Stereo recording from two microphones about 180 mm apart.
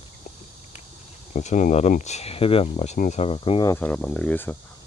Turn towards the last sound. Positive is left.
turn(degrees=10)  # may be behind; listen again after turning